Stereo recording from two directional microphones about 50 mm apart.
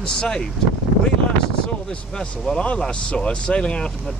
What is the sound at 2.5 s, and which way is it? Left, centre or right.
Speech, left.